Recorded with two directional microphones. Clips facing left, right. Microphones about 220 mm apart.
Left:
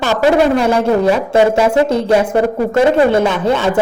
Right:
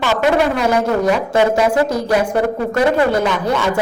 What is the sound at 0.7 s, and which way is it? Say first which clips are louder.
Speech: left 3 dB; 30° left (ahead or behind).